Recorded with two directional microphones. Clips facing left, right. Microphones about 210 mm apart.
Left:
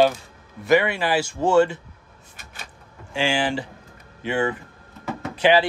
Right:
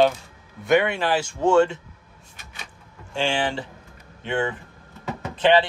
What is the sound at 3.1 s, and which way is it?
Speech, 5° left (ahead or behind).